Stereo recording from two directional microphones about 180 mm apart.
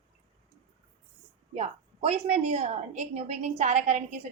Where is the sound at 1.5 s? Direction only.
35° right (ahead or behind).